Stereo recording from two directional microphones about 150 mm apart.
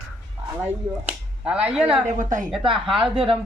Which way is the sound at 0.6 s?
10° right (ahead or behind).